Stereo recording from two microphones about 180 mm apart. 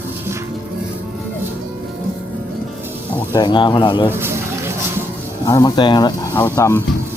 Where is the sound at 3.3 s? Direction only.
25° left (ahead or behind).